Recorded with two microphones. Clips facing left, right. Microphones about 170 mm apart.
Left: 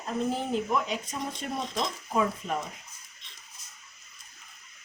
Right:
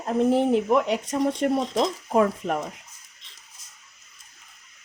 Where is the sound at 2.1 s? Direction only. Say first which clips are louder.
Right 6 dB; 60° right (ahead or behind).